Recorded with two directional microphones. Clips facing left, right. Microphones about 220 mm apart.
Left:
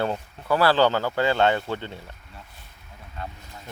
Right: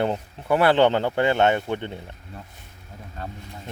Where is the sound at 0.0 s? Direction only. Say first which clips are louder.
Right 2 dB; 20° right (ahead or behind).